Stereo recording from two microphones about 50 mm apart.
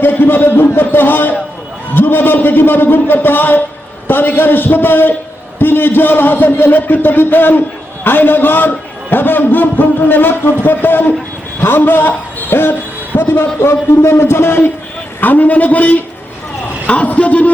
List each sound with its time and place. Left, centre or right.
0.0 s a man's voice: left
13.6 s a man's voice: left
15.2 s a man's voice: left